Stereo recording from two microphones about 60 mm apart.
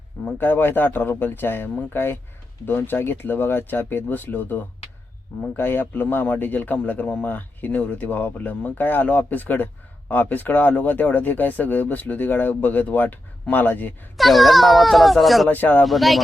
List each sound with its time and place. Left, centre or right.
0.3 s a man's voice: left
14.2 s speech: centre
15.4 s speech: left
15.9 s speech: centre